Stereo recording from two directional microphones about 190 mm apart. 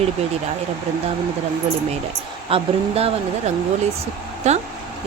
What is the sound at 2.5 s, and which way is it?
Speech, 30° right (ahead or behind).